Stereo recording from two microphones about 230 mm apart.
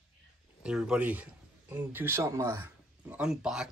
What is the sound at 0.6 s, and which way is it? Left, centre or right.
Speech, centre.